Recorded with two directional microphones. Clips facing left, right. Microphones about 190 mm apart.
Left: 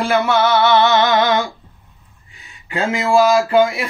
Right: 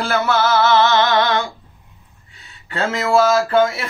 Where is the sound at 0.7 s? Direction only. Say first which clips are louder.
Left 1 dB; 15° left (ahead or behind).